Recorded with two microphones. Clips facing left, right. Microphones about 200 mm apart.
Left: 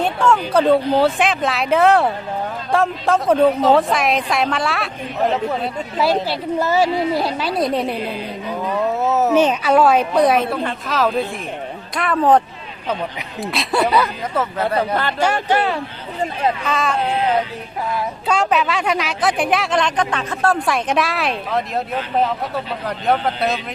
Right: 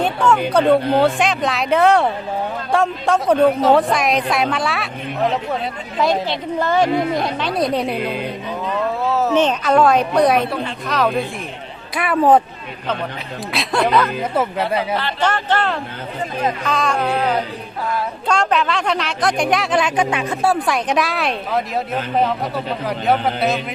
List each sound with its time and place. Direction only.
0.0 s speech: centre (ahead or behind)
6.2 s a woman's voice: 5° left (ahead or behind)
9.0 s speech: 20° left (ahead or behind)
9.3 s a woman's voice: 10° left (ahead or behind)
11.9 s speech: 10° right (ahead or behind)
13.4 s speech: centre (ahead or behind)
14.8 s speech: 50° left (ahead or behind)
15.2 s a woman's voice: 10° left (ahead or behind)
18.3 s speech: 5° left (ahead or behind)
22.9 s speech: centre (ahead or behind)